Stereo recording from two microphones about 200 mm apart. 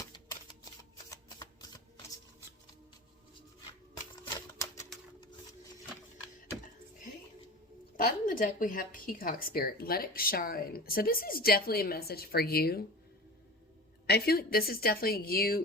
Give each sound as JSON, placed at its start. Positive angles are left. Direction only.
{"t": 0.8, "sound": "typewriter", "side_deg": 20}
{"t": 4.1, "sound": "typewriter", "side_deg": 15}
{"t": 7.9, "sound": "a woman's voice", "side_deg": 45}
{"t": 14.1, "sound": "a woman's voice", "side_deg": 50}